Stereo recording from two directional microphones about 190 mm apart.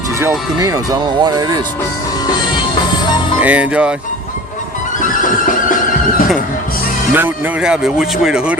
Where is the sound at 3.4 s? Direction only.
5° right (ahead or behind).